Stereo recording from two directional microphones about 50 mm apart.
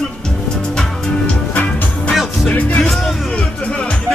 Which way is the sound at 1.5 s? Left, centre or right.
Left.